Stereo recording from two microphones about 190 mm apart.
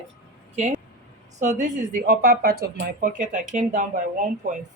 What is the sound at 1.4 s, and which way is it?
Speech, 40° right (ahead or behind).